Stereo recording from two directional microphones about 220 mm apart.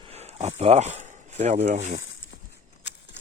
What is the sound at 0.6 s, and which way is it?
Speech, 30° right (ahead or behind).